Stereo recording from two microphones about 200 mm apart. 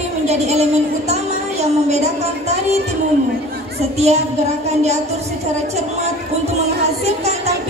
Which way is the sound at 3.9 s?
30° right (ahead or behind).